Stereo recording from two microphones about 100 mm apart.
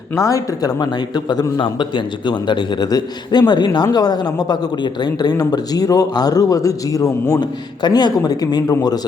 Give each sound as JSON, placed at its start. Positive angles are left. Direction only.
{"t": 0.2, "sound": "a man's voice", "side_deg": 35}
{"t": 7.8, "sound": "a man's voice", "side_deg": 45}